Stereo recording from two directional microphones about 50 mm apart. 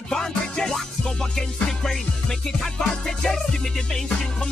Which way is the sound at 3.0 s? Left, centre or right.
Centre.